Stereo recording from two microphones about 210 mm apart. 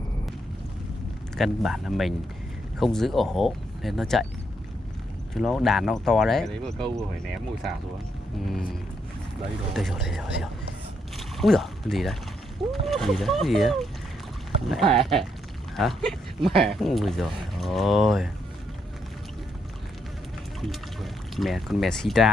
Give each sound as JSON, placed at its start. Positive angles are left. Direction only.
{"t": 1.4, "sound": "speech", "side_deg": 0}
{"t": 5.3, "sound": "speech", "side_deg": 0}
{"t": 8.4, "sound": "speech", "side_deg": 0}
{"t": 9.8, "sound": "speech", "side_deg": 0}
{"t": 20.6, "sound": "speech", "side_deg": 0}